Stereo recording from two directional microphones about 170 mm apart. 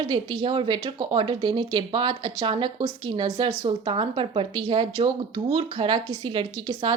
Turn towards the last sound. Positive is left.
turn(degrees=-30)  # may be behind; listen again after turning